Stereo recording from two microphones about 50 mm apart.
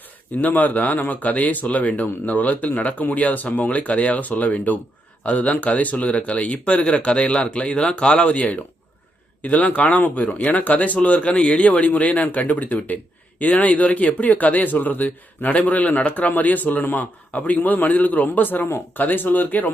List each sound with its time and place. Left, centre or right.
0.4 s speech: left